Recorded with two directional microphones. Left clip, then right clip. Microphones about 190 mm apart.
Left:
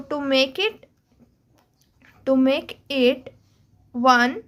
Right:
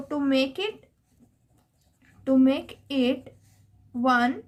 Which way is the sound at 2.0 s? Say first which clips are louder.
Left 3 dB; 35° left (ahead or behind).